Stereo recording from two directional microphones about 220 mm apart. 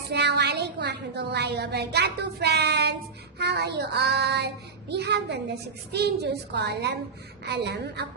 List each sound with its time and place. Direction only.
0.1 s a woman's voice: 50° right (ahead or behind)